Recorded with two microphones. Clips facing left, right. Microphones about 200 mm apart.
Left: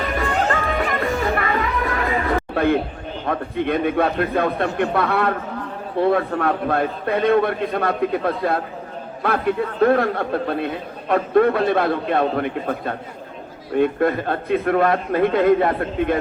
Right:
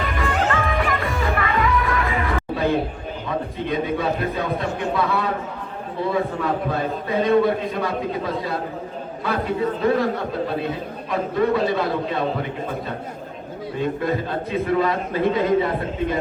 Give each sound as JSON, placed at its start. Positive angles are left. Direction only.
{"t": 0.1, "sound": "music", "side_deg": 35}
{"t": 3.2, "sound": "a man's voice", "side_deg": 60}